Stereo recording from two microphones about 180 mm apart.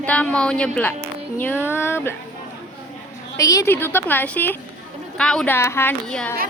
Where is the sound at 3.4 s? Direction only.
20° left (ahead or behind).